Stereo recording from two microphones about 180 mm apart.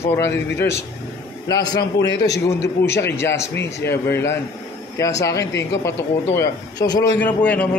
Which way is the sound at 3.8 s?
15° left (ahead or behind).